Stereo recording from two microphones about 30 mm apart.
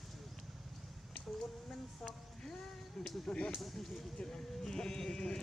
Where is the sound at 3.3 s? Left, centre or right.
Left.